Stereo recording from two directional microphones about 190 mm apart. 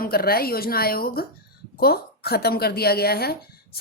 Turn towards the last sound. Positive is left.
turn(degrees=55)  # may be behind; listen again after turning